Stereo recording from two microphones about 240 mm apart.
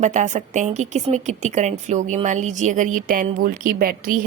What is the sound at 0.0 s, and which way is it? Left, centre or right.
A woman's voice, right.